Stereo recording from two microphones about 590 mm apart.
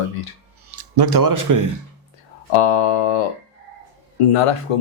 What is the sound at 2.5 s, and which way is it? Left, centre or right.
Speech, left.